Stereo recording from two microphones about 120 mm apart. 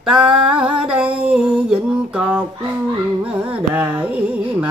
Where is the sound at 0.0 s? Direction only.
5° right (ahead or behind).